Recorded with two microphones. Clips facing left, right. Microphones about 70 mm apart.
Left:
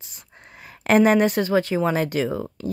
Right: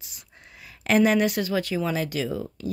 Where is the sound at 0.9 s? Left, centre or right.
Left.